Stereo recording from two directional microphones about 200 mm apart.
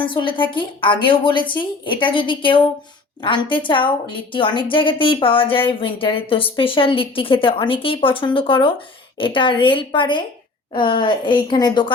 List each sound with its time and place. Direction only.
0.0 s a woman's voice: 25° left (ahead or behind)